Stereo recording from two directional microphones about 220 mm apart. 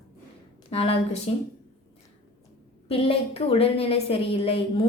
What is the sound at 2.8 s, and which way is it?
A woman's voice, 25° left (ahead or behind).